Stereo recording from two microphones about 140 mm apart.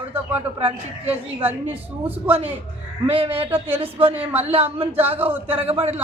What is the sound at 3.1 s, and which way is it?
A man's voice, 40° right (ahead or behind).